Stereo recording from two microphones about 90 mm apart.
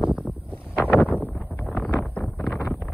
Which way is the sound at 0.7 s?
20° left (ahead or behind).